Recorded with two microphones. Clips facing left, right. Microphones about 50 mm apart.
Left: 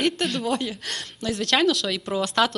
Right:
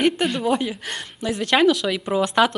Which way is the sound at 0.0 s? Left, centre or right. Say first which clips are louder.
Right 4 dB; centre.